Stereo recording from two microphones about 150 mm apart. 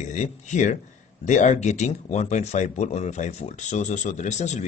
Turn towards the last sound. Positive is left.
turn(degrees=50)  # may be behind; listen again after turning